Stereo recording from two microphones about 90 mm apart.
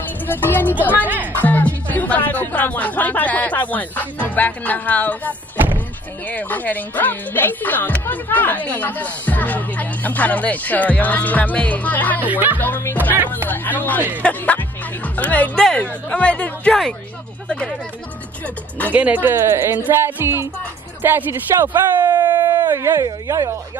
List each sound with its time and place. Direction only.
0.3 s speech: 20° left (ahead or behind)
1.0 s speech: 20° right (ahead or behind)
1.3 s speech: 20° left (ahead or behind)
12.2 s speech: 20° right (ahead or behind)
12.5 s speech: 20° left (ahead or behind)
18.9 s speech: 15° right (ahead or behind)
22.0 s speech: 50° right (ahead or behind)
22.3 s a sound: 25° right (ahead or behind)
23.0 s speech: 40° right (ahead or behind)